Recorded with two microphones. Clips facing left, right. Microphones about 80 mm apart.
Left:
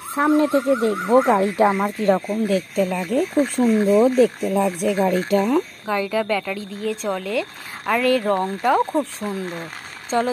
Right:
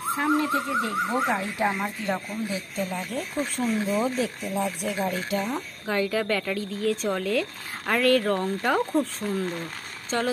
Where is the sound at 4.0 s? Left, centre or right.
Left.